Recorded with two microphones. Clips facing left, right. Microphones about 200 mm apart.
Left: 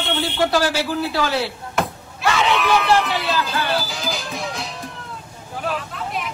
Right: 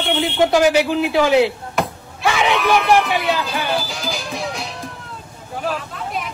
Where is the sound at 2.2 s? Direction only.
15° right (ahead or behind).